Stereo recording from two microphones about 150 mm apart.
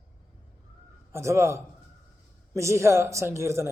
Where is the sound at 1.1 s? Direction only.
20° right (ahead or behind).